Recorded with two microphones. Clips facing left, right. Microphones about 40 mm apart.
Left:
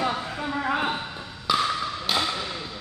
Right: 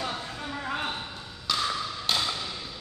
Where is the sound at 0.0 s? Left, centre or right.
Centre.